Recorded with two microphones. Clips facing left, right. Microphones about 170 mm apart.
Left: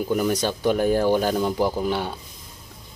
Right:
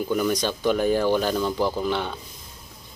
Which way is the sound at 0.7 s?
45° left (ahead or behind).